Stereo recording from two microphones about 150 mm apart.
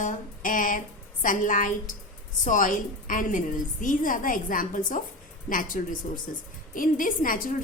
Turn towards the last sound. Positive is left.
turn(degrees=65)  # may be behind; listen again after turning